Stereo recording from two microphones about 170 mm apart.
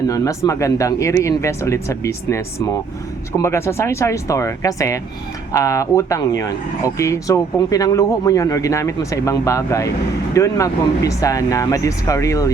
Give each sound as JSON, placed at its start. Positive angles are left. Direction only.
{"t": 0.1, "sound": "speech", "side_deg": 20}